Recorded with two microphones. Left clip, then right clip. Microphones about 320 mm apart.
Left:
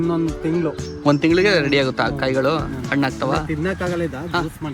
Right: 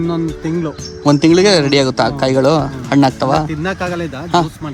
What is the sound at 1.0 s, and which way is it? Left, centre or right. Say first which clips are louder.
Speech: right 6 dB; centre.